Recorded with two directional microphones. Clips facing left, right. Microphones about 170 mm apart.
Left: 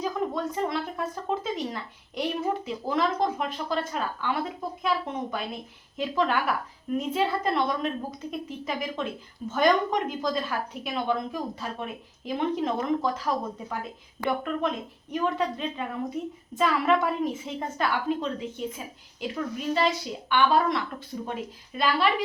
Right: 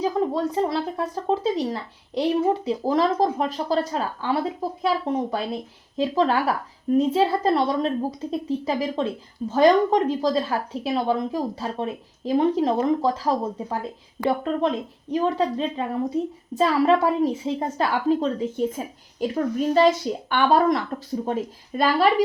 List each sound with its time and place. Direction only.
0.0 s a woman's voice: 30° right (ahead or behind)